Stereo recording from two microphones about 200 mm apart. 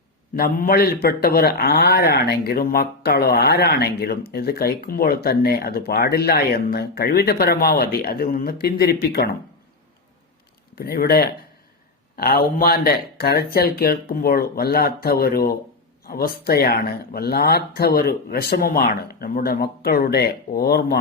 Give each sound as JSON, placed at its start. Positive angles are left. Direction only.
{"t": 0.3, "sound": "speech", "side_deg": 50}
{"t": 10.8, "sound": "speech", "side_deg": 50}